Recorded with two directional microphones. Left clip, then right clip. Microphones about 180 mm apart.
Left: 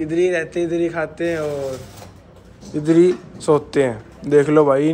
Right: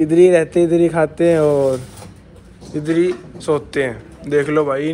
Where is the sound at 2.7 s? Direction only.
30° left (ahead or behind).